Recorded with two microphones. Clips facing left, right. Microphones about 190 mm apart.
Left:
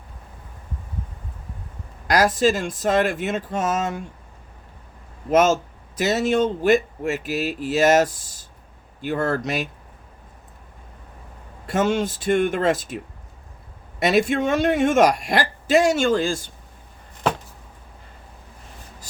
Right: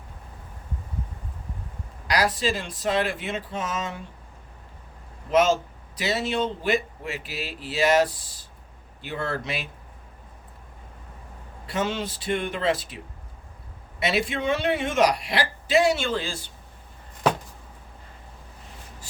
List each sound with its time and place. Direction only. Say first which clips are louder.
2.0 s speech: left 6 dB; 45° left (ahead or behind)
5.3 s speech: left 3 dB; 45° left (ahead or behind)
11.6 s speech: left 7 dB; 45° left (ahead or behind)
14.0 s speech: left 6 dB; 45° left (ahead or behind)